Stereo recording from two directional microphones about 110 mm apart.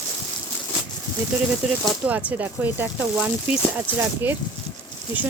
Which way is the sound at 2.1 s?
15° right (ahead or behind).